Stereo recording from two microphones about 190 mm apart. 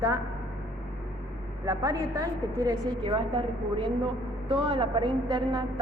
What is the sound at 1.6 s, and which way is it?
A woman's voice, 20° right (ahead or behind).